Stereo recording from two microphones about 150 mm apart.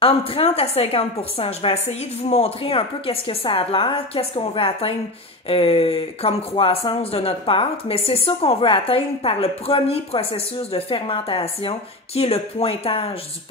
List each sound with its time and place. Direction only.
0.0 s speech: 40° left (ahead or behind)